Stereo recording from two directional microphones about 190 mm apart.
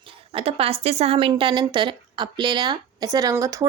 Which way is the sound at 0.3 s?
30° right (ahead or behind).